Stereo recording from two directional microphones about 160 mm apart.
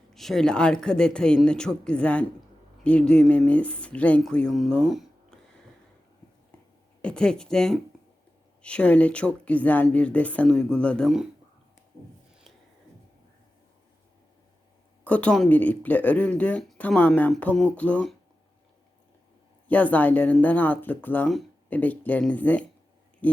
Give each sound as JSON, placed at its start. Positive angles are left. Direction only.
{"t": 0.1, "sound": "speech", "side_deg": 0}
{"t": 7.0, "sound": "speech", "side_deg": 5}
{"t": 15.0, "sound": "speech", "side_deg": 10}
{"t": 19.6, "sound": "speech", "side_deg": 10}